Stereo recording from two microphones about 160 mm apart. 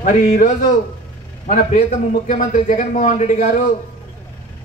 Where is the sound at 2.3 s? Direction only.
50° left (ahead or behind).